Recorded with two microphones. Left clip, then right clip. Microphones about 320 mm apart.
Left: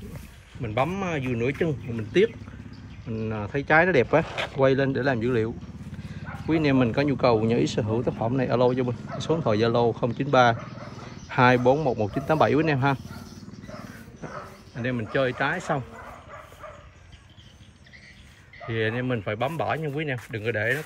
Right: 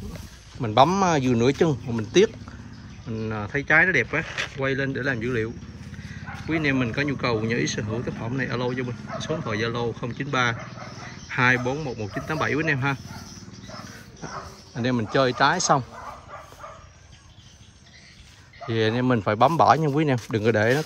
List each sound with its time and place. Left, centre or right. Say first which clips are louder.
0.7 s speech: right 9 dB; centre
1.4 s speech: right 2 dB; right
2.0 s speech: right 2 dB; centre
6.5 s speech: left 2 dB; centre
14.8 s speech: right 3 dB; centre
18.7 s speech: right 4 dB; centre
19.8 s speech: right 6 dB; right